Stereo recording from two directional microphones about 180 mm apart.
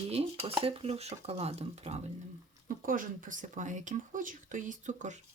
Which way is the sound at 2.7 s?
50° right (ahead or behind).